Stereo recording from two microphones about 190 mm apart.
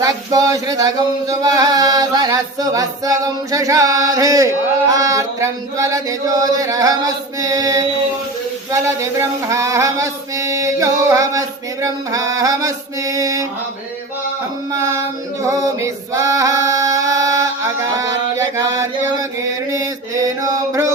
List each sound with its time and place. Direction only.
0.0 s a sound: 20° right (ahead or behind)
9.5 s mantra: 15° right (ahead or behind)
15.4 s male singing: 20° right (ahead or behind)
19.4 s mantra: 15° right (ahead or behind)